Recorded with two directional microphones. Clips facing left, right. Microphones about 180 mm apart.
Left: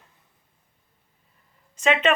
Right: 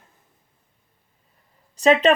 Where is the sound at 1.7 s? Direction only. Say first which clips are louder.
Right 5 dB; 35° right (ahead or behind).